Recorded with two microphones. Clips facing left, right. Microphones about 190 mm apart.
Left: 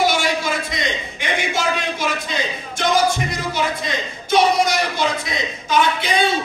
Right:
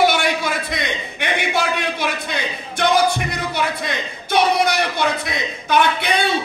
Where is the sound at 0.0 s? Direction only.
60° right (ahead or behind).